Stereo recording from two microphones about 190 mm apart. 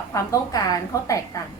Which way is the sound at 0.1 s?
20° left (ahead or behind).